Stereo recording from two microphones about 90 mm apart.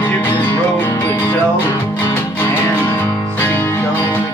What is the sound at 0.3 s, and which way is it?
Music, 20° left (ahead or behind).